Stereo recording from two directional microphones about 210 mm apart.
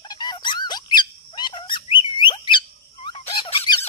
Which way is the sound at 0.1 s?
20° left (ahead or behind).